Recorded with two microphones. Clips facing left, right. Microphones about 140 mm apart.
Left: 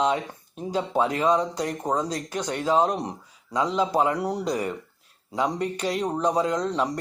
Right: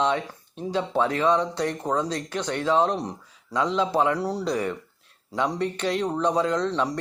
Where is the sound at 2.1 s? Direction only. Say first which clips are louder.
Right 1 dB; 40° left (ahead or behind).